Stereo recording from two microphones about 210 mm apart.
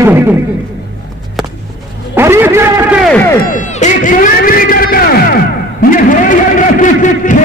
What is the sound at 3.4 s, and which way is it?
Speech, 35° left (ahead or behind).